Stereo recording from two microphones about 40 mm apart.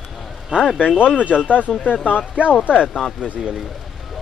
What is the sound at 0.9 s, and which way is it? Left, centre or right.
Speech, left.